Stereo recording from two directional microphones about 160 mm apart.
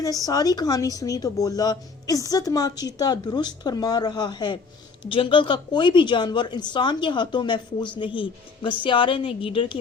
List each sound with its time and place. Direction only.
0.0 s a woman's voice: 20° left (ahead or behind)